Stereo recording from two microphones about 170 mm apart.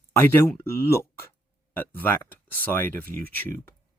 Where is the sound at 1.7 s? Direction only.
10° left (ahead or behind).